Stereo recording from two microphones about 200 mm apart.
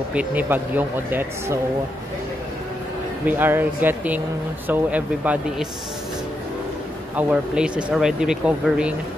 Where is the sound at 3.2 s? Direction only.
10° right (ahead or behind).